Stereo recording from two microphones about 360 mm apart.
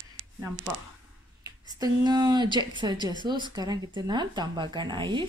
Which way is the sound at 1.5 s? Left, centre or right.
Centre.